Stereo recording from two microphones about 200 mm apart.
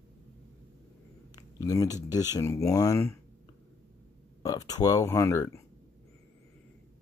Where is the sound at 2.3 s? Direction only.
15° left (ahead or behind).